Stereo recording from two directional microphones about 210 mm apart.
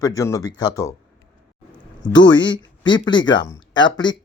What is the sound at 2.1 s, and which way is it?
Speech, 20° left (ahead or behind).